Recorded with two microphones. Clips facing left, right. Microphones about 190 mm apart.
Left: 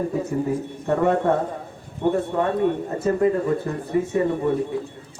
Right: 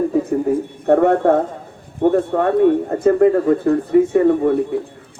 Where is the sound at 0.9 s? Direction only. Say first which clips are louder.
Right 6 dB; 60° right (ahead or behind).